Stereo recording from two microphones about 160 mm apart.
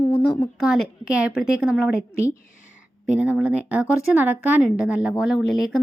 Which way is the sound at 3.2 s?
5° right (ahead or behind).